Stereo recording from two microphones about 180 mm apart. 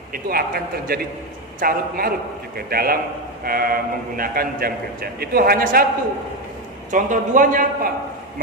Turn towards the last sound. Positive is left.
turn(degrees=-50)  # may be behind; listen again after turning